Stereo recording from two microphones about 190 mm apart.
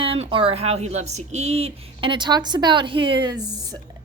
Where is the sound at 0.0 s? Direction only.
30° right (ahead or behind).